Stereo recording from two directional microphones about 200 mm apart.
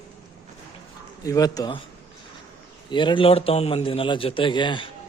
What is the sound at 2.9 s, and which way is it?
A man's voice, 25° left (ahead or behind).